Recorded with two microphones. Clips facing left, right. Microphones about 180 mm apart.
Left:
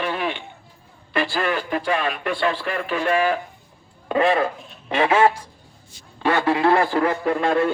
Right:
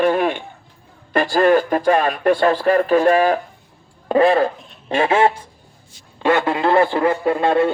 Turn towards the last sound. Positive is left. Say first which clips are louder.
# right 3 dB
turn(degrees=-30)  # may be behind; listen again after turning